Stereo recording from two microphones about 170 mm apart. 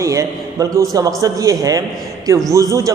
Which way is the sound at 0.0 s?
20° right (ahead or behind).